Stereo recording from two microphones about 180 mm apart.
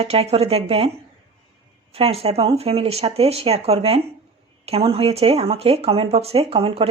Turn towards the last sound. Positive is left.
turn(degrees=-30)  # may be behind; listen again after turning